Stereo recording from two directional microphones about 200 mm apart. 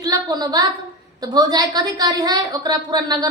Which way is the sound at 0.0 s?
20° right (ahead or behind).